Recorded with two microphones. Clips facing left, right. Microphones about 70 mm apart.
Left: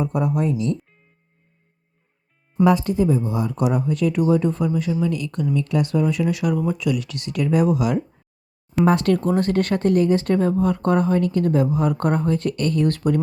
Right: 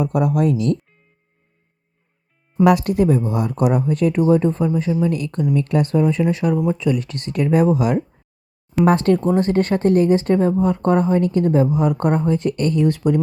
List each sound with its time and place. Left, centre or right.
0.0 s speech: right
2.6 s speech: right
9.1 s speech: right
12.8 s speech: centre